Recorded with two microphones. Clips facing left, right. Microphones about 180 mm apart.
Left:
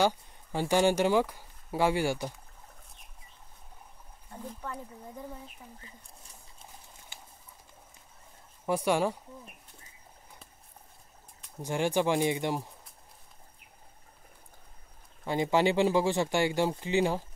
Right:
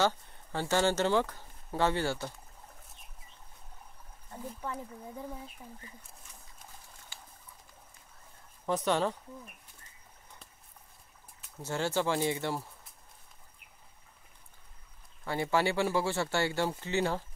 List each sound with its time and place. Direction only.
0.0 s speech: 15° left (ahead or behind)
8.6 s speech: 10° left (ahead or behind)
11.6 s speech: 15° left (ahead or behind)
15.2 s speech: 15° left (ahead or behind)